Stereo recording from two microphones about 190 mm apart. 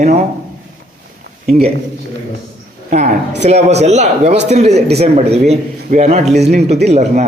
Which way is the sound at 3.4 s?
35° right (ahead or behind).